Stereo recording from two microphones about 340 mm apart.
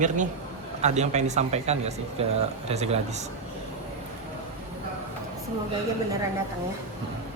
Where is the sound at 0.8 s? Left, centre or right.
Centre.